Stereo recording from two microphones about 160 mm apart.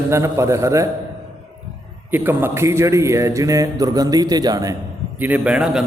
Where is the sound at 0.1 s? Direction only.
20° right (ahead or behind).